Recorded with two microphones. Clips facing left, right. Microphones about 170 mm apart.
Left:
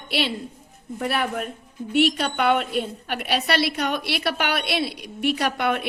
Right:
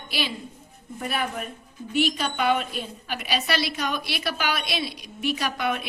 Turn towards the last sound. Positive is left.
turn(degrees=65)  # may be behind; listen again after turning